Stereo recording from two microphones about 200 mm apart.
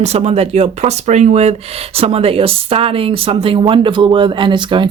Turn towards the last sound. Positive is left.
turn(degrees=-25)  # may be behind; listen again after turning